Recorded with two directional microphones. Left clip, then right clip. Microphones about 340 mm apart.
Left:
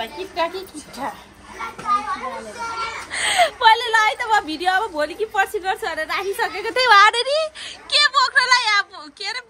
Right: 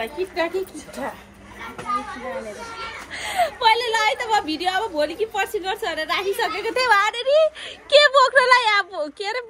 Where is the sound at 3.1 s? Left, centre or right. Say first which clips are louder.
Left 5 dB; left.